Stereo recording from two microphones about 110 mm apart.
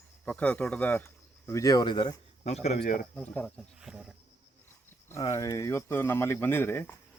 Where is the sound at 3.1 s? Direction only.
10° left (ahead or behind).